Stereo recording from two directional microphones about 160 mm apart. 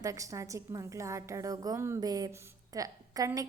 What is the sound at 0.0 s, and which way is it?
A woman's voice, 20° right (ahead or behind).